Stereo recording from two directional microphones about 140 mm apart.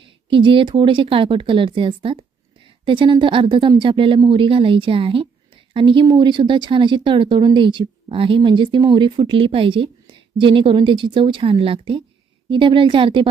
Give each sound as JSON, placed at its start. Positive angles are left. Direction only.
{"t": 0.0, "sound": "speech", "side_deg": -35}